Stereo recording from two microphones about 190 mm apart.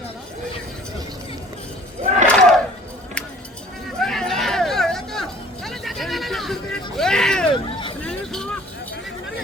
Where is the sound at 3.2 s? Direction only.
5° left (ahead or behind).